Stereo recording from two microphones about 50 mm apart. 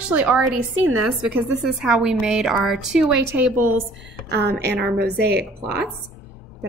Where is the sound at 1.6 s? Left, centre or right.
Centre.